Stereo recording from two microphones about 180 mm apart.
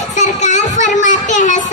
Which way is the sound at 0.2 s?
40° left (ahead or behind).